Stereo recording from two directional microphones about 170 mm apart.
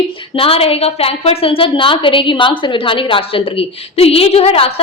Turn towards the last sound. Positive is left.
turn(degrees=35)  # may be behind; listen again after turning